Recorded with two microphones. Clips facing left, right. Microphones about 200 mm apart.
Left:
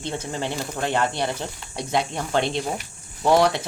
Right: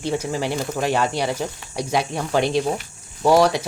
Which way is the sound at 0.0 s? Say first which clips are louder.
Right 5 dB; 10° right (ahead or behind).